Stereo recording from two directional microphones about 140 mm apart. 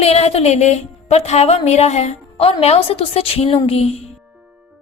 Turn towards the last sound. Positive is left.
turn(degrees=45)  # may be behind; listen again after turning